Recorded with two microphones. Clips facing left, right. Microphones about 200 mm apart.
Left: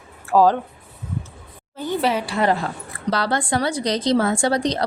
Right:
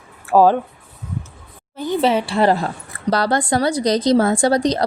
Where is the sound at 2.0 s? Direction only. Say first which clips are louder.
Right 4 dB; 25° right (ahead or behind).